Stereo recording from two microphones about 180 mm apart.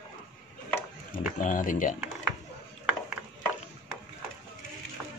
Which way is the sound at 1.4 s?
45° left (ahead or behind).